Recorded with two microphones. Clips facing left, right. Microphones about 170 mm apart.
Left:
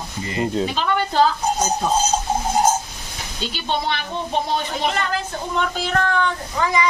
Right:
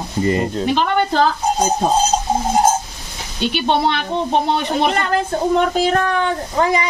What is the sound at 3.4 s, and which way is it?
Speech, 65° right (ahead or behind).